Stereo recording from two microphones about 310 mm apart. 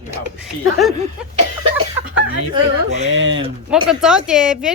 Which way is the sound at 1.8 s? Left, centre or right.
Right.